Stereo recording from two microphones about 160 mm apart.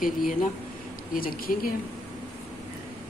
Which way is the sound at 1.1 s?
65° left (ahead or behind).